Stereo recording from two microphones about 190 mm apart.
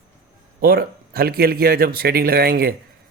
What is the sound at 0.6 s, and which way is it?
Speech, 50° right (ahead or behind).